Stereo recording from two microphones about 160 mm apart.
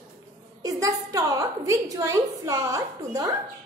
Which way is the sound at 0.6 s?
20° right (ahead or behind).